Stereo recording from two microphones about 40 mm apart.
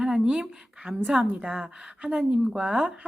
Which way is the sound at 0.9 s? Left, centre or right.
Right.